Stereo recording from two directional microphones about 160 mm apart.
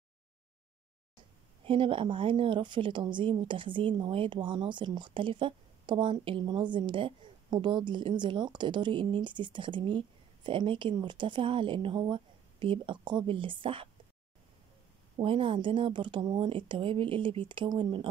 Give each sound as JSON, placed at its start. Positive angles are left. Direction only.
{"t": 1.6, "sound": "a woman's voice", "side_deg": -35}
{"t": 15.1, "sound": "a woman's voice", "side_deg": -35}